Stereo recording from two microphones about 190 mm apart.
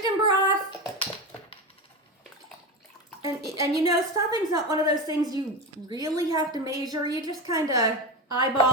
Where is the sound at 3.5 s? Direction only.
20° right (ahead or behind).